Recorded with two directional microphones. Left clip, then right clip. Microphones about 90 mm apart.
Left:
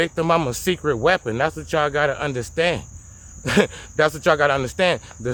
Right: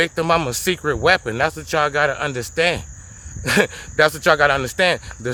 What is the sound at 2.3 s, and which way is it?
Speech, 20° left (ahead or behind).